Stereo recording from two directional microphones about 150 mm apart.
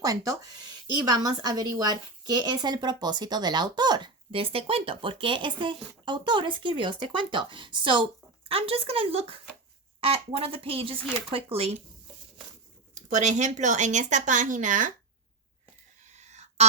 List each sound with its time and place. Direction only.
0.0 s a woman's voice: 25° right (ahead or behind); by 11.8 s 40° right (ahead or behind)
13.1 s a woman's voice: 55° right (ahead or behind)
16.0 s a sound: 50° right (ahead or behind)